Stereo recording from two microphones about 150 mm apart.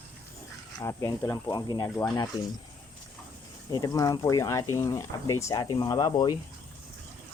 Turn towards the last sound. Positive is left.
turn(degrees=25)  # may be behind; listen again after turning